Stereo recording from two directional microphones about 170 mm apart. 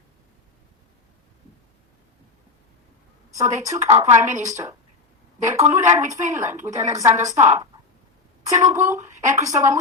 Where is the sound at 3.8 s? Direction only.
45° right (ahead or behind).